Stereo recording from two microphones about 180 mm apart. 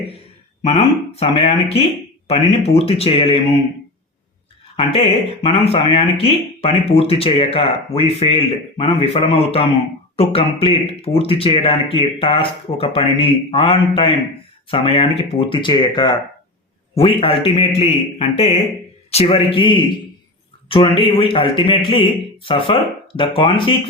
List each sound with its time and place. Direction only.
0.6 s speech: 35° left (ahead or behind)
4.8 s a man's voice: 30° left (ahead or behind)